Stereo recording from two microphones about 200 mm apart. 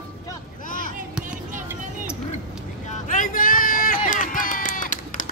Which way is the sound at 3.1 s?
40° left (ahead or behind).